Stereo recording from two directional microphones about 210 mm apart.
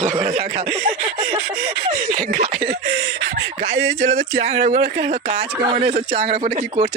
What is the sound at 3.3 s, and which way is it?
Speech, 30° right (ahead or behind).